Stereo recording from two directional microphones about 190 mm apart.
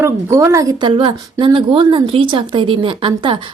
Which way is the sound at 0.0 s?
15° right (ahead or behind).